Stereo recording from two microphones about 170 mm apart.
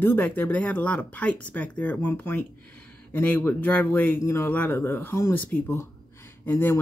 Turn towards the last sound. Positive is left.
turn(degrees=15)  # may be behind; listen again after turning